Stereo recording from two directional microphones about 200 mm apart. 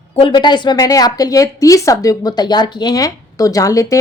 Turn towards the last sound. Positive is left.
turn(degrees=15)  # may be behind; listen again after turning